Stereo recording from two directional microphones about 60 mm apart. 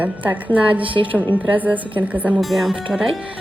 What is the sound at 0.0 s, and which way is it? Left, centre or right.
A woman's voice, right.